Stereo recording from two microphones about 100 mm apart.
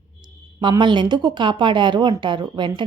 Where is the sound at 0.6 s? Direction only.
55° right (ahead or behind).